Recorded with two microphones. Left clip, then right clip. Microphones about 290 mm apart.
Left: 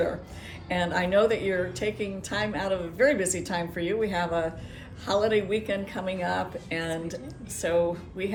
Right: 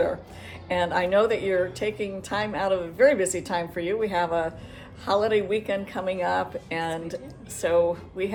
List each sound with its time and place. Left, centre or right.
0.7 s a woman's voice: centre